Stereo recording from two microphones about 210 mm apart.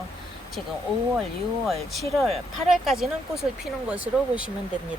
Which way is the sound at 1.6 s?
Centre (ahead or behind).